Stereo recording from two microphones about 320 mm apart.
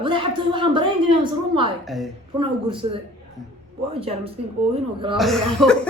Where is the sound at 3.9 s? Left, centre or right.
Centre.